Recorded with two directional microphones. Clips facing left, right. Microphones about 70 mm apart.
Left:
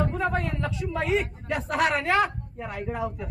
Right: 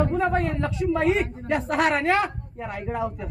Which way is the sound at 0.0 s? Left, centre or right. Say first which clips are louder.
Right 4 dB; right.